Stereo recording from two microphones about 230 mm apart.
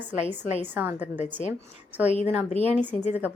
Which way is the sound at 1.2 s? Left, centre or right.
Left.